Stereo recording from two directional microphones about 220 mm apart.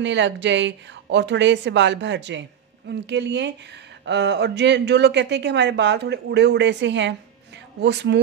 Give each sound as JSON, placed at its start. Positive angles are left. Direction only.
{"t": 0.0, "sound": "speech", "side_deg": -55}